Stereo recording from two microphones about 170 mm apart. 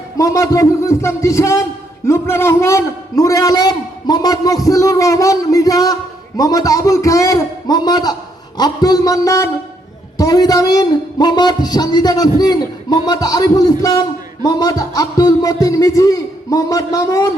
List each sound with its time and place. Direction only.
0.2 s a man's voice: 20° left (ahead or behind)